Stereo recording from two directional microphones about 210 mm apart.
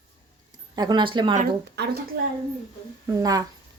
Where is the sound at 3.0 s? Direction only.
15° right (ahead or behind).